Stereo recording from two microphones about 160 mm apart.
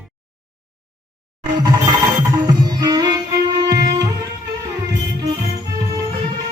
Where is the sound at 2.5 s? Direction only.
25° right (ahead or behind).